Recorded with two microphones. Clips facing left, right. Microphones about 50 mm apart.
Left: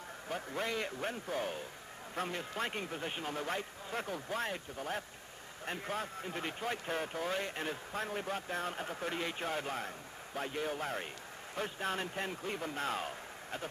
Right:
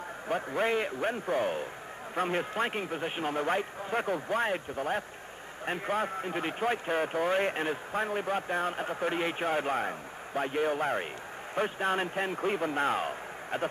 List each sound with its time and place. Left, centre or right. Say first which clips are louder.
0.3 s a man's voice: right 9 dB; right
2.6 s a man's voice: right 6 dB; centre